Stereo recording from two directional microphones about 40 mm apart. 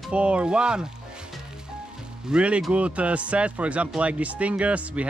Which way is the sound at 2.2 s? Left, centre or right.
Right.